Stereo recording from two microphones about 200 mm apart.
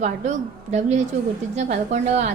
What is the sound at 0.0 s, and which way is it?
A woman's voice, 35° right (ahead or behind).